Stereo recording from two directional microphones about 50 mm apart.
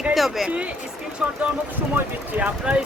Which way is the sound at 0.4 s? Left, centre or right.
Right.